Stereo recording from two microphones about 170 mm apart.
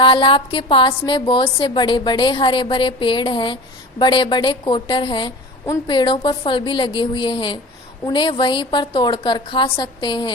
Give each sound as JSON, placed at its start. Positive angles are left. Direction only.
{"t": 0.0, "sound": "a woman's voice", "side_deg": 30}